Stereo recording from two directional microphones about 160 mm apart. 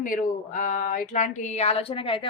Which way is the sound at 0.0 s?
60° left (ahead or behind).